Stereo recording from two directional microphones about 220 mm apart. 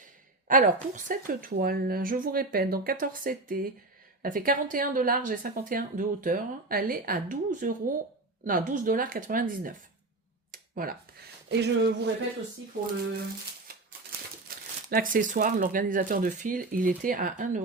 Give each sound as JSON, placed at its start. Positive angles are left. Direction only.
{"t": 0.4, "sound": "a woman's voice", "side_deg": -35}
{"t": 14.4, "sound": "a woman's voice", "side_deg": -40}